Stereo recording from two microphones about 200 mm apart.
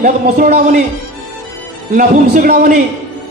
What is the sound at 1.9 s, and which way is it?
Speech, 45° right (ahead or behind).